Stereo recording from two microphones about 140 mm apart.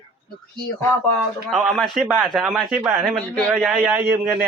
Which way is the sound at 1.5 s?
Centre (ahead or behind).